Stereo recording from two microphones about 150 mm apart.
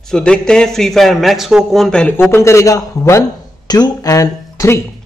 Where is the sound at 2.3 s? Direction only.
20° left (ahead or behind).